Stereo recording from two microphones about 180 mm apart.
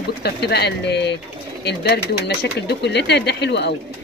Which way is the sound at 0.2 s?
65° left (ahead or behind).